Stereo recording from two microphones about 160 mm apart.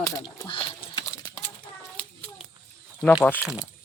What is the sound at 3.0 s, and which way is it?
Speech, 5° left (ahead or behind).